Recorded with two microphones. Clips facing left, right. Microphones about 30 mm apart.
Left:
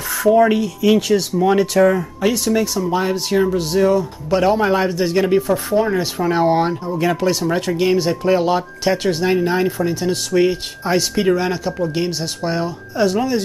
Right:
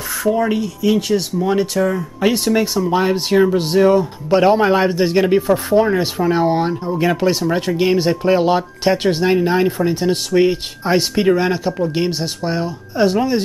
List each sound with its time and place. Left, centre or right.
0.2 s speech: centre
2.5 s speech: centre
3.5 s speech: right
4.8 s speech: right
5.1 s speech: centre
6.1 s speech: centre
6.9 s speech: centre
9.2 s speech: centre
9.7 s speech: right; by 12.3 s centre
12.4 s speech: centre
12.9 s speech: centre